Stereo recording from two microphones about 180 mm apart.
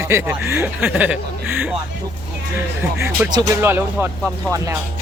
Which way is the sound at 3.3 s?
20° right (ahead or behind).